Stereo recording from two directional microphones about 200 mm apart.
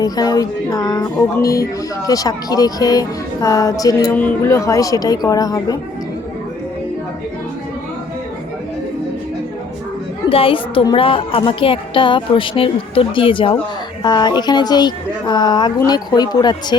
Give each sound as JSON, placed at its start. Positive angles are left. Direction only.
{"t": 0.0, "sound": "speech", "side_deg": 20}
{"t": 10.2, "sound": "speech", "side_deg": 25}